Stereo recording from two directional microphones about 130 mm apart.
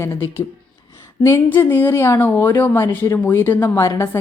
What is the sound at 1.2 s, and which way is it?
A woman's voice, 20° left (ahead or behind).